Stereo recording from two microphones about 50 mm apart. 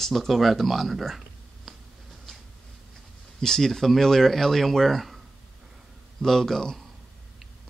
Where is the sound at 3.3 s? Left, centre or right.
Centre.